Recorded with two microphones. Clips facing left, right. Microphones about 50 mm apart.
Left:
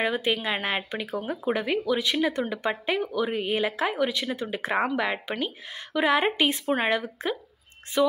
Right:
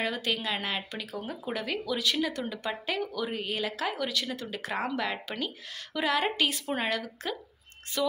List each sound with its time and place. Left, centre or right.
0.0 s speech: left